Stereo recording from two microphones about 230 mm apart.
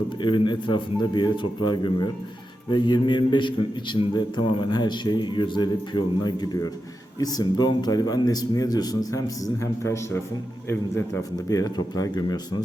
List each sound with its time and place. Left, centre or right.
0.2 s speech: centre